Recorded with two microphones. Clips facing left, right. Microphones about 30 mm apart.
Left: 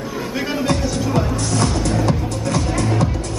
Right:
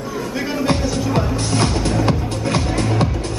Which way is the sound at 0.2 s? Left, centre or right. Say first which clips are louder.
Even; centre.